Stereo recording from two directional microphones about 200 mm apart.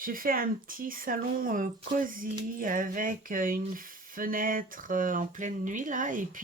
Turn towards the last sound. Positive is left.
turn(degrees=-40)  # may be behind; listen again after turning